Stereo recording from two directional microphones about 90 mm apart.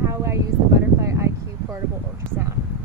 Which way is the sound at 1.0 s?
35° right (ahead or behind).